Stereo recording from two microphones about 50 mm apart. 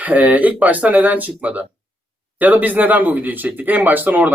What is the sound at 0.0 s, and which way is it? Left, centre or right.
Speech, right.